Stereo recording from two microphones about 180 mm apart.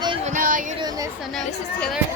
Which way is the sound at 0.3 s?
50° right (ahead or behind).